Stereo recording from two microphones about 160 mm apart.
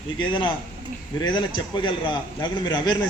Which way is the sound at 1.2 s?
30° left (ahead or behind).